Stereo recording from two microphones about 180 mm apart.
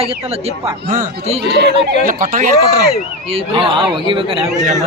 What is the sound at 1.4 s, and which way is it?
Speech, 65° right (ahead or behind).